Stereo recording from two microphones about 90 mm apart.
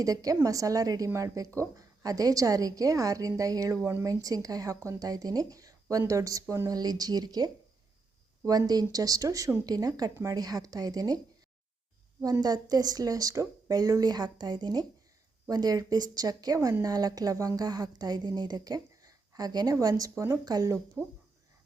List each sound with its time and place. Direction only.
0.0 s a woman's voice: 40° right (ahead or behind)
12.2 s a woman's voice: 45° right (ahead or behind)